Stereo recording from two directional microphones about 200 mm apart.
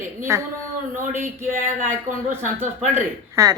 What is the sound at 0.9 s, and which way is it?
Speech, 40° right (ahead or behind).